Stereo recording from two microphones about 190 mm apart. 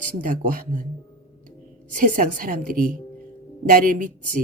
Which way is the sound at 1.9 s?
45° right (ahead or behind).